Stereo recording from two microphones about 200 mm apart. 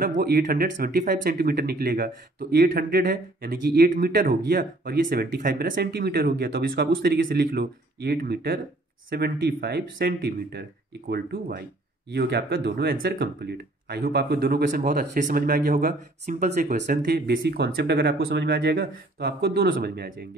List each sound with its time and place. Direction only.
0.2 s speech: 45° right (ahead or behind)